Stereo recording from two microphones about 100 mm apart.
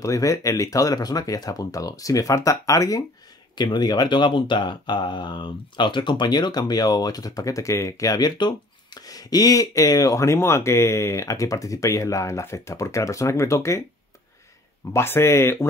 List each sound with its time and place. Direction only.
0.0 s speech: 35° left (ahead or behind)
3.5 s speech: 45° left (ahead or behind); by 13.8 s 30° left (ahead or behind)
14.9 s speech: 25° left (ahead or behind)